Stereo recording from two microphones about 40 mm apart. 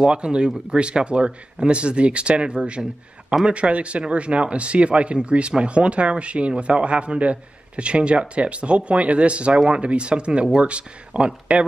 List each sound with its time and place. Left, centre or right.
0.0 s a man's voice: right